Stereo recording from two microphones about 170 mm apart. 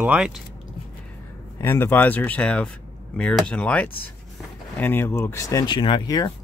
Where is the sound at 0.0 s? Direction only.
5° right (ahead or behind).